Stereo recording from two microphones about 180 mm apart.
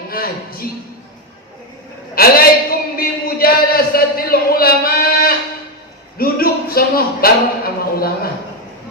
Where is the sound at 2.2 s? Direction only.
55° left (ahead or behind).